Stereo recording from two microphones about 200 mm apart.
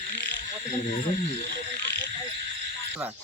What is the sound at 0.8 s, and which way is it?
Speech, 50° left (ahead or behind).